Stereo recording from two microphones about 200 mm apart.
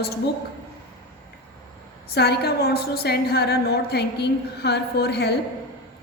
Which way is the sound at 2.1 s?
55° left (ahead or behind).